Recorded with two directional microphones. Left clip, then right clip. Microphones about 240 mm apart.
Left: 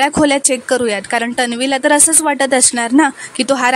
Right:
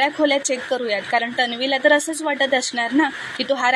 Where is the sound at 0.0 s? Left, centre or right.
Left.